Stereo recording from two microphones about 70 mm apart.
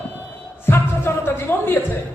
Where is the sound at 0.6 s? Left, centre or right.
Left.